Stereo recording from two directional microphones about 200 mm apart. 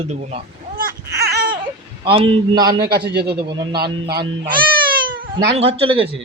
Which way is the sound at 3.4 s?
20° right (ahead or behind).